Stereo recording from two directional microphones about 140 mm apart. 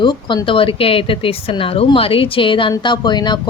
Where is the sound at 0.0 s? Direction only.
35° left (ahead or behind).